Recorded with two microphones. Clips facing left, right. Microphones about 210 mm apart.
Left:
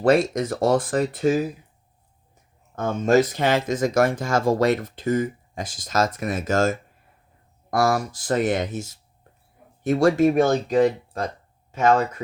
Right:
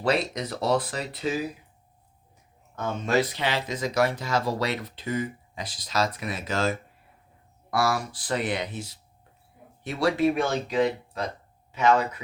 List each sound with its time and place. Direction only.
0.0 s speech: 50° left (ahead or behind)
2.7 s speech: 45° left (ahead or behind)